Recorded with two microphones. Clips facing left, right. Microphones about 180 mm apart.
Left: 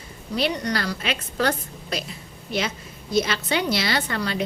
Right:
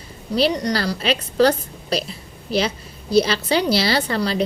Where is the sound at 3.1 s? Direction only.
35° right (ahead or behind).